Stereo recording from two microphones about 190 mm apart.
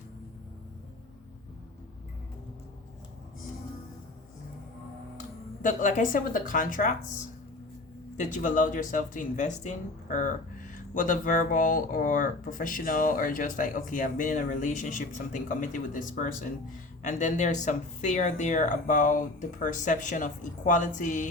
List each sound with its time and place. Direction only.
5.6 s speech: 45° left (ahead or behind)
8.1 s speech: 40° left (ahead or behind)